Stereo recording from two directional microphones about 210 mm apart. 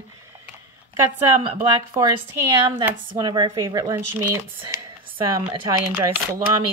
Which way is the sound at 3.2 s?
20° right (ahead or behind).